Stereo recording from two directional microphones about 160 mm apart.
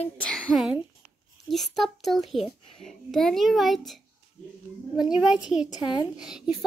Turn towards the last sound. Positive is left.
turn(degrees=-5)  # may be behind; listen again after turning